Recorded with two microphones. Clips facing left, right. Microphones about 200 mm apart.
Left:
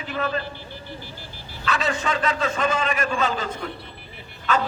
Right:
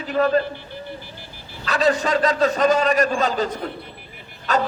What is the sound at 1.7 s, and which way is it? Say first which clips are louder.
A man's voice: right 6 dB; 40° right (ahead or behind).